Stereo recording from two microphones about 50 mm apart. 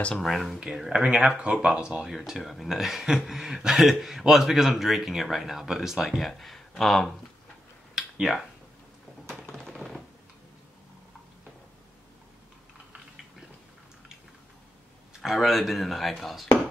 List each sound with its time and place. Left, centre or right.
0.2 s speech: centre
1.3 s speech: right
2.0 s speech: centre
7.9 s a sound: centre
15.2 s speech: centre